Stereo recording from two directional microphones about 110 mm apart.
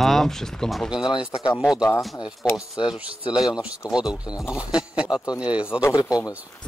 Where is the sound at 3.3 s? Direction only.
5° right (ahead or behind).